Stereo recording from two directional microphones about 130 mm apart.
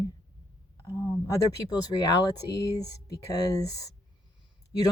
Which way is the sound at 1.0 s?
25° left (ahead or behind).